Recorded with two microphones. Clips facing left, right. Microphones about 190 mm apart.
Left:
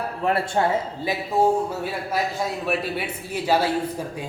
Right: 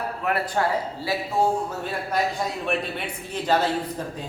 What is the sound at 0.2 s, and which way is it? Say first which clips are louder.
Speech: left 3 dB; 30° left (ahead or behind).